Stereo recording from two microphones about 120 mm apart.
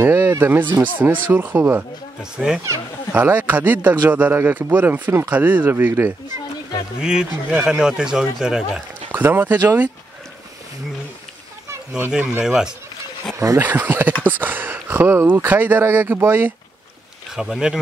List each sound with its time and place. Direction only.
0.0 s speech: 20° right (ahead or behind)
7.0 s speech: 5° right (ahead or behind)
12.1 s speech: 10° right (ahead or behind)
17.4 s speech: 5° right (ahead or behind)